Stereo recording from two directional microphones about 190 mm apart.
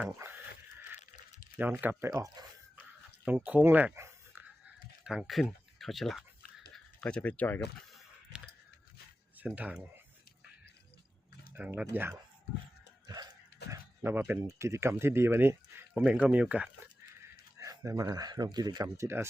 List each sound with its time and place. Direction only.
0.0 s a sound: 10° right (ahead or behind)
1.5 s speech: 10° right (ahead or behind)
3.2 s speech: 5° right (ahead or behind)
5.0 s speech: centre (ahead or behind)
9.4 s speech: 5° right (ahead or behind)
11.5 s speech: 10° right (ahead or behind)
13.7 s speech: 10° right (ahead or behind)